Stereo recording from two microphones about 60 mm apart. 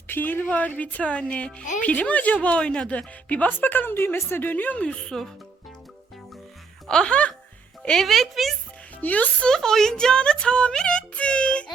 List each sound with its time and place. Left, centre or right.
0.1 s speech: left; by 3.1 s centre
3.2 s a woman's voice: left
4.9 s a woman's voice: centre
6.8 s a woman's voice: centre
7.8 s music: centre
8.0 s speech: centre
9.0 s speech: left
9.5 s a woman's voice: centre